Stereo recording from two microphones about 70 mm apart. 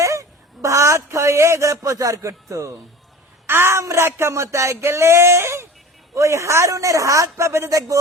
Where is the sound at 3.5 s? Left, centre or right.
Right.